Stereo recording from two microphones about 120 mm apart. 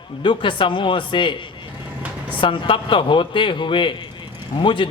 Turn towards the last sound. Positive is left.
turn(degrees=45)  # may be behind; listen again after turning